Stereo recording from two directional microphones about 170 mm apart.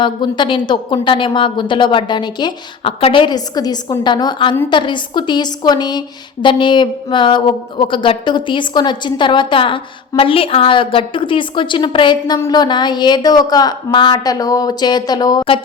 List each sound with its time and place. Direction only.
0.0 s speech: 25° left (ahead or behind)